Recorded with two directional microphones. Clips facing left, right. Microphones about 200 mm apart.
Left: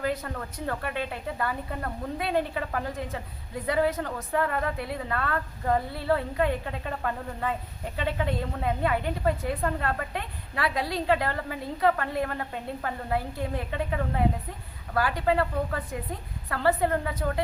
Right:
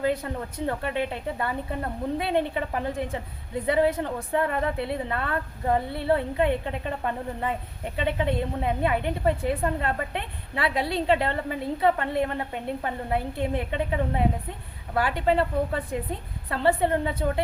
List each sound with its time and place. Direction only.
0.0 s speech: 20° right (ahead or behind)